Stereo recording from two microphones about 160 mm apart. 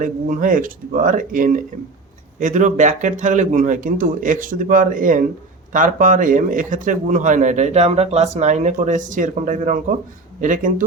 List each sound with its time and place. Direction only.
0.0 s speech: 55° right (ahead or behind)